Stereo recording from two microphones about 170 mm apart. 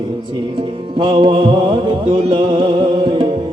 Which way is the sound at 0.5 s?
30° right (ahead or behind).